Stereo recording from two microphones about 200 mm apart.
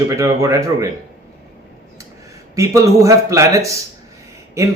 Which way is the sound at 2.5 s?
15° right (ahead or behind).